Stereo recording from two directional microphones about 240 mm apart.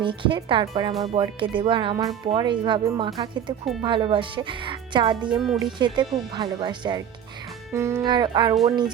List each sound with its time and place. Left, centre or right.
0.0 s speech: right